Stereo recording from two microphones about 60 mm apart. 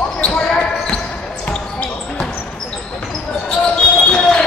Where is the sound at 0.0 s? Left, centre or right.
Centre.